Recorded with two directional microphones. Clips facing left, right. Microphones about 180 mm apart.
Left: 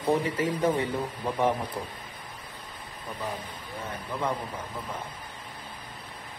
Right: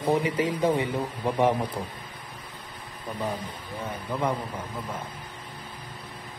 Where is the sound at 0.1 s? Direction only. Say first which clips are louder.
Right 1 dB; 15° right (ahead or behind).